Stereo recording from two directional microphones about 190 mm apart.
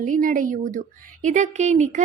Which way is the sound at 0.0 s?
45° right (ahead or behind).